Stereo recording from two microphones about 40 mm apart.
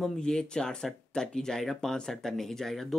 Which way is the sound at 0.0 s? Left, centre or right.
Centre.